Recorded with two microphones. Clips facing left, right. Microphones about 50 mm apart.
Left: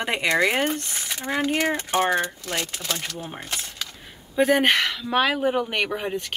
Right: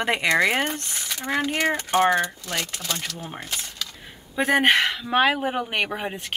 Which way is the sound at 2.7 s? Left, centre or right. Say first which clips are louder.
Left 1 dB; centre.